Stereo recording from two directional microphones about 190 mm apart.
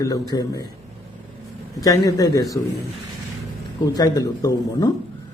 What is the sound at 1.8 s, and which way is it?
Speech, 20° left (ahead or behind).